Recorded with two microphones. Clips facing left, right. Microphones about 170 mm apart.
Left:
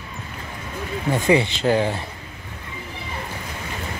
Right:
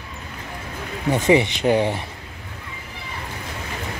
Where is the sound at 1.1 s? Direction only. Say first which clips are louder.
Right 2 dB; 20° right (ahead or behind).